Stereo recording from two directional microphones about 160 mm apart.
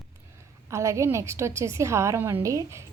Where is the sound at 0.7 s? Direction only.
20° right (ahead or behind).